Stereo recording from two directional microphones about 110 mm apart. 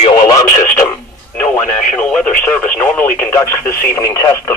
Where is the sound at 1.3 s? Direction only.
10° left (ahead or behind).